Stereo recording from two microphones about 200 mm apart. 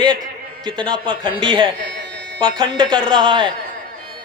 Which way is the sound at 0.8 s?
25° right (ahead or behind).